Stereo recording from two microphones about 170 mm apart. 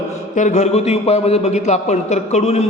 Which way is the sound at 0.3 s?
45° left (ahead or behind).